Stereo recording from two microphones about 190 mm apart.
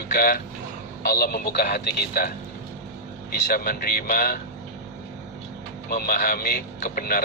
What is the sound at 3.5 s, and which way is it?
Speech, 55° left (ahead or behind).